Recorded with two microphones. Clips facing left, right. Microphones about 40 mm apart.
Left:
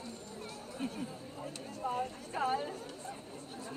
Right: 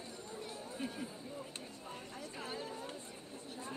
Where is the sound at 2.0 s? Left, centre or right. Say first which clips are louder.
Left 11 dB; left.